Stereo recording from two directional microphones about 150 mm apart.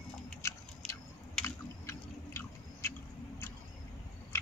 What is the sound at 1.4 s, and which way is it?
Chewing, 15° left (ahead or behind).